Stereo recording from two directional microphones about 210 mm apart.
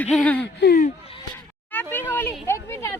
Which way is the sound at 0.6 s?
45° left (ahead or behind).